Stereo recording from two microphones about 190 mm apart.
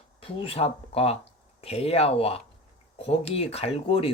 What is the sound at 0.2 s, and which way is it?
Speech, 30° left (ahead or behind).